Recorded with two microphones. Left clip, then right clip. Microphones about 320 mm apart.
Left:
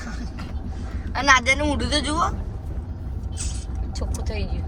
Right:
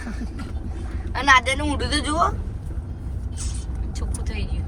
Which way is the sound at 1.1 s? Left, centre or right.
Centre.